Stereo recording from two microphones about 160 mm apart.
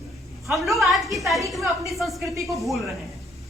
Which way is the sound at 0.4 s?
Centre (ahead or behind).